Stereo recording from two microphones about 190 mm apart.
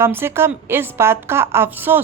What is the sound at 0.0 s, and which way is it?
A woman's voice, 15° right (ahead or behind).